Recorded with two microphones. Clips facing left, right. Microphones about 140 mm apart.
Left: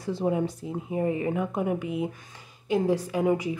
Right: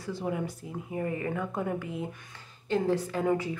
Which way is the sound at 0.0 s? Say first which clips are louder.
Left 6 dB; 25° left (ahead or behind).